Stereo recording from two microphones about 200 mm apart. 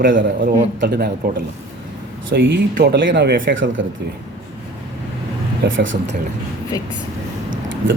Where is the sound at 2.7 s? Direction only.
55° right (ahead or behind); by 3.8 s 70° right (ahead or behind).